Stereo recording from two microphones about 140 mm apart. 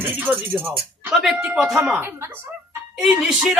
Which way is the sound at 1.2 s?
10° right (ahead or behind).